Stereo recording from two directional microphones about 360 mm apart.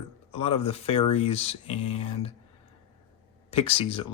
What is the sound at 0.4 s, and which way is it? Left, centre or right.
Speech, centre.